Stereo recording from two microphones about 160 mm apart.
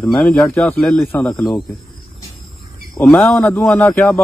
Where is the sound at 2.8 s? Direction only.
5° left (ahead or behind).